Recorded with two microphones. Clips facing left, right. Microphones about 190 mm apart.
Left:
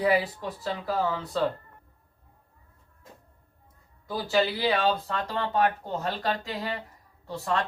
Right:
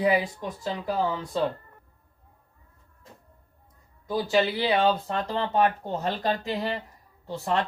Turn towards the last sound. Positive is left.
turn(degrees=-20)  # may be behind; listen again after turning